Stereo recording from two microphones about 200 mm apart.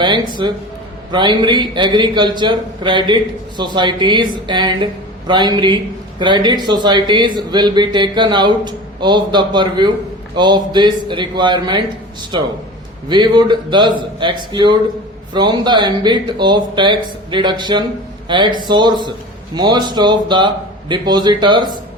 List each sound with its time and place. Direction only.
0.0 s a man's voice: 25° right (ahead or behind)